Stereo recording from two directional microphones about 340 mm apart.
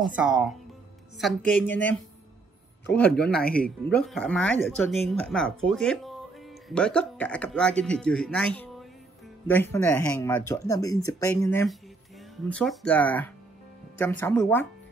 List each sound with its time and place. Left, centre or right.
0.0 s speech: centre
2.9 s speech: centre
3.3 s speech: left
3.9 s speech: centre